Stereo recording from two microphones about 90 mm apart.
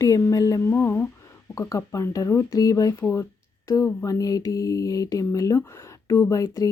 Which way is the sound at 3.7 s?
40° left (ahead or behind).